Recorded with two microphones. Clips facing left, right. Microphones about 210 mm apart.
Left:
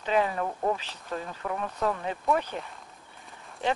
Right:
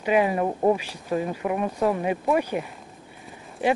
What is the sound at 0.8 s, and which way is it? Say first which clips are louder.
Speech: right 9 dB; 10° right (ahead or behind).